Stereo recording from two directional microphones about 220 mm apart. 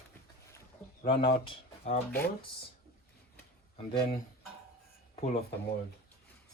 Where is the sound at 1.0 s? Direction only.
25° left (ahead or behind).